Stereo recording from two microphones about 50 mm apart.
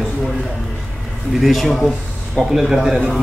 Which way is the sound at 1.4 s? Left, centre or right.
Centre.